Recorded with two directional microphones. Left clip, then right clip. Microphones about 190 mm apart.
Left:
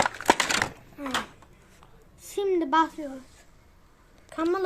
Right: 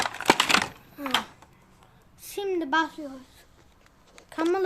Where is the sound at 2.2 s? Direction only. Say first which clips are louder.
Left 3 dB; 20° right (ahead or behind).